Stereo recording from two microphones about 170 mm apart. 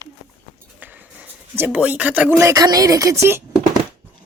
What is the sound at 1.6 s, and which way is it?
Speech, 10° right (ahead or behind).